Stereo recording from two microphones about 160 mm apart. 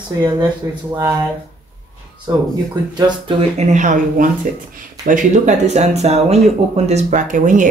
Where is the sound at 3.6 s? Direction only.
50° right (ahead or behind).